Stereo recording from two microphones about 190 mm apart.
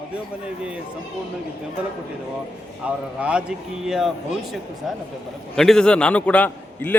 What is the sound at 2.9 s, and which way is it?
A man's voice, 5° right (ahead or behind).